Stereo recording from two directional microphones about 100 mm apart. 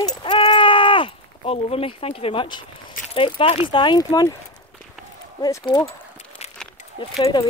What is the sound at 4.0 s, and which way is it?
Speech, 40° left (ahead or behind).